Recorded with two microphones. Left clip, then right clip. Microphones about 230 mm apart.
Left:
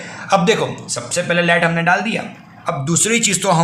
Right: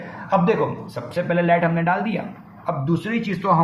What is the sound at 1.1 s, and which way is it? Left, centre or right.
Speech, left.